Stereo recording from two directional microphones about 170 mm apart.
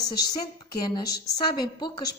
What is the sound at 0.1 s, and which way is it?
Speech, 25° left (ahead or behind).